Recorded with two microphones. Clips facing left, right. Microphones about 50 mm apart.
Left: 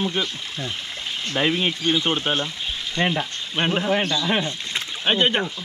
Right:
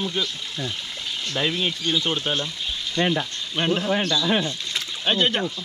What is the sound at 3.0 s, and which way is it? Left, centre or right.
Frying, left.